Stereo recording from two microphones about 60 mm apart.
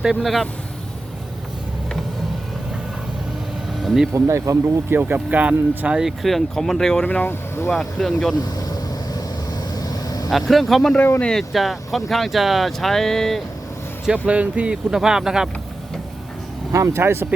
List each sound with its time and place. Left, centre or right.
0.0 s speech: centre
3.8 s speech: centre
4.1 s speech: right
4.9 s speech: right
6.0 s speech: centre
7.0 s speech: centre
7.3 s speech: left
7.7 s speech: centre
9.7 s vehicle: left
10.2 s speech: centre
14.1 s speech: right
16.7 s speech: right
17.0 s speech: right